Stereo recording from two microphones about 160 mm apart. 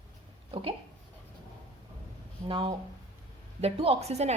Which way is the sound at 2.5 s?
30° right (ahead or behind).